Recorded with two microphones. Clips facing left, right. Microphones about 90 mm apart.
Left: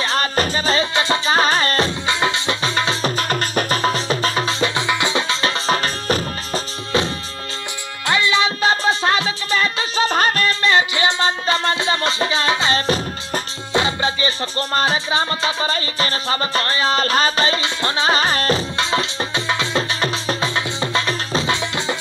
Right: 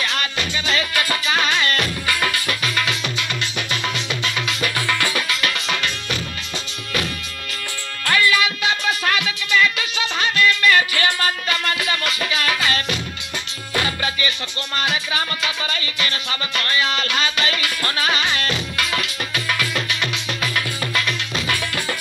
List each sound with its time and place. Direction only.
0.0 s music: 35° left (ahead or behind)
8.0 s music: 20° left (ahead or behind); by 10.7 s 40° left (ahead or behind)
10.7 s music: 25° left (ahead or behind)